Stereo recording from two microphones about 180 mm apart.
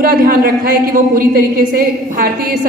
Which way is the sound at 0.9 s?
50° right (ahead or behind).